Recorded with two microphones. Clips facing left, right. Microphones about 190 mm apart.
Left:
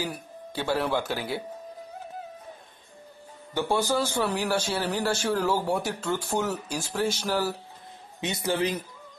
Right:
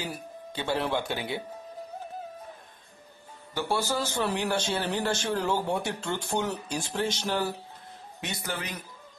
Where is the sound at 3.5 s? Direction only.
15° left (ahead or behind).